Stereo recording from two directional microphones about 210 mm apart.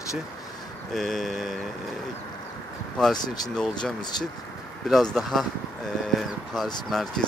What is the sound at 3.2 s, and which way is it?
Speech, 20° left (ahead or behind).